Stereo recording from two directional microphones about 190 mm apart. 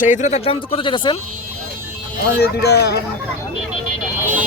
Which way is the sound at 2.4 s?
60° left (ahead or behind).